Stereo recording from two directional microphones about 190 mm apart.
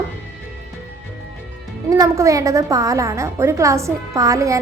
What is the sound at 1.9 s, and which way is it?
A woman's voice, 15° right (ahead or behind).